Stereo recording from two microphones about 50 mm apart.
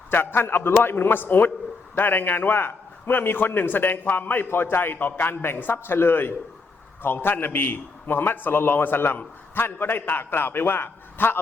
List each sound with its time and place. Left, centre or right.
0.1 s a man's voice: left